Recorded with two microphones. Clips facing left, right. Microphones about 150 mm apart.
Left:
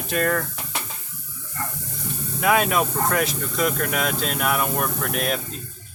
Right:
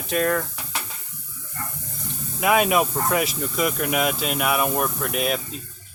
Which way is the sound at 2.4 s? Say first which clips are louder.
Right 1 dB; 5° right (ahead or behind).